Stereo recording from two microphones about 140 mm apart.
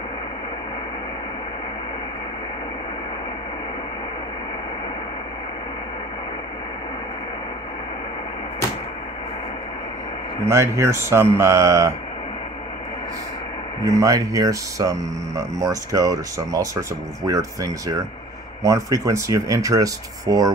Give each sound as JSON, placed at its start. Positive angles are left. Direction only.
{"t": 10.4, "sound": "speech", "side_deg": -20}
{"t": 13.8, "sound": "speech", "side_deg": -25}